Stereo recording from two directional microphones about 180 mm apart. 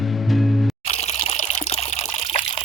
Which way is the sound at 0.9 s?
35° left (ahead or behind).